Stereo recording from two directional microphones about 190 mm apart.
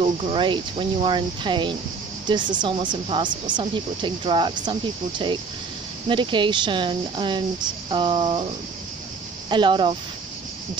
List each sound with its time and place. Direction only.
0.0 s speech: 30° right (ahead or behind)
9.5 s speech: 25° right (ahead or behind)